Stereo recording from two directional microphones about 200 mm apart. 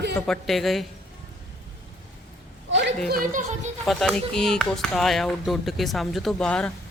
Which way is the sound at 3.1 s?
40° right (ahead or behind).